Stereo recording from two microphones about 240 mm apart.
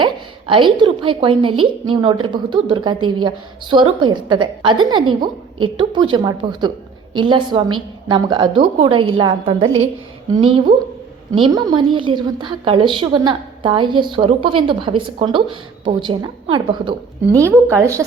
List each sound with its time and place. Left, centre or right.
0.0 s a woman's voice: right